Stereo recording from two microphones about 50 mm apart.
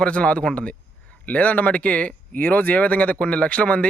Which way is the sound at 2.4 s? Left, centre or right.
Left.